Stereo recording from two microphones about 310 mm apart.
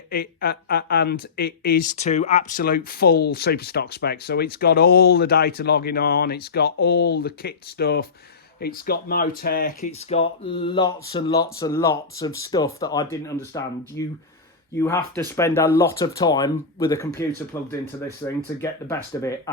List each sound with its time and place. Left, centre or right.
0.1 s speech: left; by 19.3 s centre